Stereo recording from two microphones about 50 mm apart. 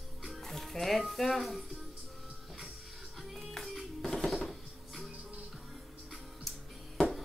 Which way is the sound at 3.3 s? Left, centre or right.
Centre.